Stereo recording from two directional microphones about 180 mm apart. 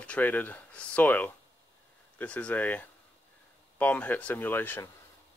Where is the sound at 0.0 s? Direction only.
10° left (ahead or behind).